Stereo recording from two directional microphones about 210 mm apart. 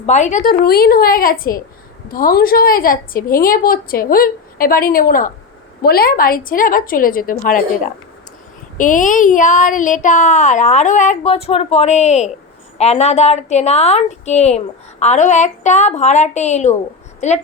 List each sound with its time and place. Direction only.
0.0 s a woman's voice: 35° left (ahead or behind)
8.8 s a woman's voice: 40° left (ahead or behind)